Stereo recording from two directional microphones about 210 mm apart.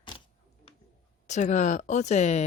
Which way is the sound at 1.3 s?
35° left (ahead or behind).